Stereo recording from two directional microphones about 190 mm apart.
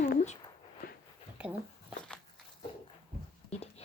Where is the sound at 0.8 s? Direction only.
50° left (ahead or behind).